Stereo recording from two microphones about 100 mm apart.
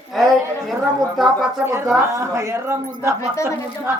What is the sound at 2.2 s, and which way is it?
Speech, 30° right (ahead or behind).